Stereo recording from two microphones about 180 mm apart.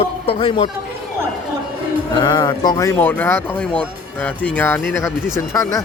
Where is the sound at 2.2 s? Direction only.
25° left (ahead or behind).